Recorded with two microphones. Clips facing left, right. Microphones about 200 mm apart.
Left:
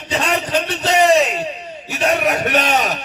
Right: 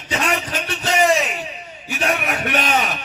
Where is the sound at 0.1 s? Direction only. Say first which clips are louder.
Left 4 dB; 35° left (ahead or behind).